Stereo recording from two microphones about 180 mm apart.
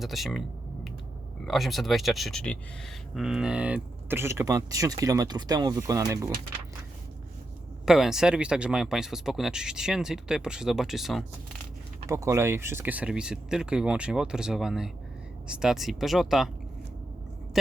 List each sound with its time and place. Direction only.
0.0 s speech: centre (ahead or behind)
1.5 s speech: centre (ahead or behind); by 6.3 s 20° right (ahead or behind)
7.9 s speech: centre (ahead or behind)
12.0 s speech: 15° right (ahead or behind); by 16.5 s centre (ahead or behind)